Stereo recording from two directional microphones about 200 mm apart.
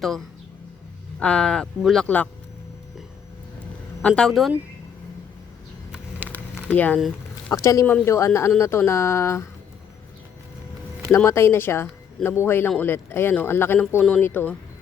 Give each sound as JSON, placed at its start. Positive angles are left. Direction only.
{"t": 1.2, "sound": "speech", "side_deg": 5}
{"t": 4.0, "sound": "speech", "side_deg": 5}
{"t": 5.9, "sound": "a sound", "side_deg": -10}
{"t": 6.3, "sound": "a sound", "side_deg": 10}
{"t": 7.5, "sound": "a man's voice", "side_deg": 15}
{"t": 11.1, "sound": "a man's voice", "side_deg": 10}